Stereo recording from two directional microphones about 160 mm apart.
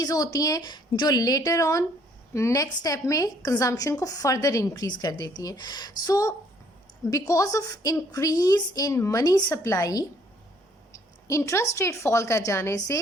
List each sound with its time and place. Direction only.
0.0 s a woman's voice: 25° left (ahead or behind)